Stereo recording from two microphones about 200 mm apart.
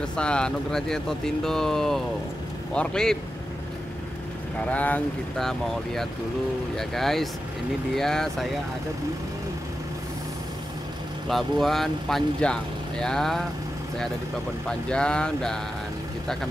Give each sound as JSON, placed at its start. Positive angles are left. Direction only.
{"t": 0.0, "sound": "speech", "side_deg": 5}
{"t": 4.6, "sound": "speech", "side_deg": 10}
{"t": 11.2, "sound": "speech", "side_deg": 0}
{"t": 14.7, "sound": "speech", "side_deg": 5}